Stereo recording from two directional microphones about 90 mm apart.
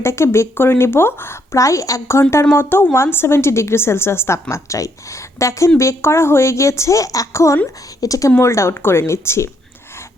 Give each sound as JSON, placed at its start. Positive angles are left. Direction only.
{"t": 0.0, "sound": "a woman's voice", "side_deg": 30}